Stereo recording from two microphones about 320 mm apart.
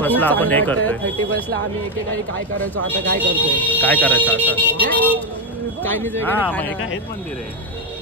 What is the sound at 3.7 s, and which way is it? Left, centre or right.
Speech, centre.